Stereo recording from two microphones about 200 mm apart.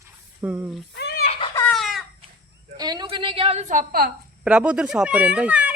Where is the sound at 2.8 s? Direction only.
20° right (ahead or behind); by 4.0 s 45° right (ahead or behind).